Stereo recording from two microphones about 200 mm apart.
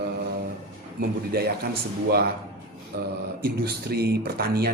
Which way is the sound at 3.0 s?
50° right (ahead or behind).